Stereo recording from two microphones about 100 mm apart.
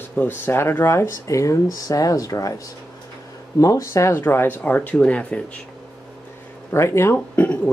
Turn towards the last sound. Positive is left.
turn(degrees=20)  # may be behind; listen again after turning